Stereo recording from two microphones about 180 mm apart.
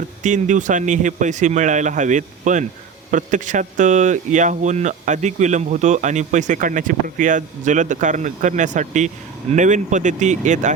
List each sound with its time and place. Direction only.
0.2 s speech: 45° right (ahead or behind)